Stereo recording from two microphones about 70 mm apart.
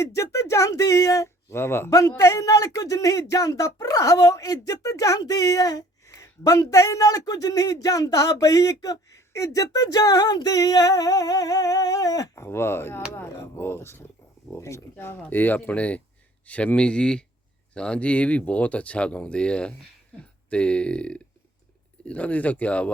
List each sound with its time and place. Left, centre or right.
0.0 s speech: left
1.5 s speech: left
1.9 s a man's voice: left
12.4 s speech: left; by 22.9 s centre